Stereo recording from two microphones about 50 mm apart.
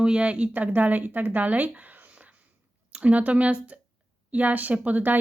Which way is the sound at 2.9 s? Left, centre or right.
Right.